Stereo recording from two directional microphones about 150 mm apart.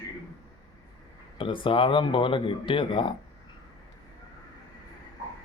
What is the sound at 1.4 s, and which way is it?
Speech, 35° left (ahead or behind).